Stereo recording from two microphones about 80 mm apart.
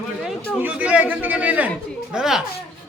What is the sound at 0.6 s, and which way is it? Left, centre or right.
A man's voice, centre.